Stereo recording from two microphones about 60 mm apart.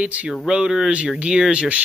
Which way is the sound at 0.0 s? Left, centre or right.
Right.